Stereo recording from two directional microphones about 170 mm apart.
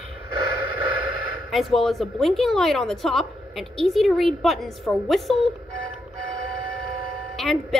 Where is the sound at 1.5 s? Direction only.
Centre (ahead or behind).